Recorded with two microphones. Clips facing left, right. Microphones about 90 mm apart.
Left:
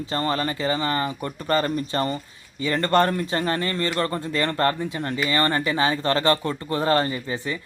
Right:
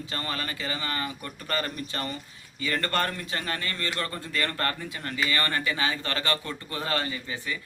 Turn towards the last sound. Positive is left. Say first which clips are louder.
# left 6 dB
turn(degrees=30)  # may be behind; listen again after turning